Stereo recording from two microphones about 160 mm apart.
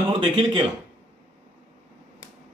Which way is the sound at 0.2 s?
30° right (ahead or behind).